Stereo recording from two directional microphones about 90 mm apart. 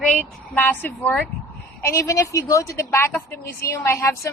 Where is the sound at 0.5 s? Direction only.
20° left (ahead or behind).